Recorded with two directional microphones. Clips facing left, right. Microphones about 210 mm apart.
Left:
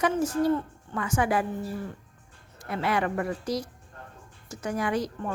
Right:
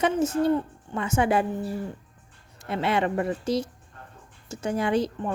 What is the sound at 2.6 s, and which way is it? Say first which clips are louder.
Speech: right 2 dB; 25° right (ahead or behind).